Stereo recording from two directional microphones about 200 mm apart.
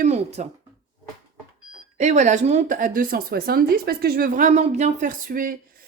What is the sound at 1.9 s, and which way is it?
A woman's voice, 35° right (ahead or behind).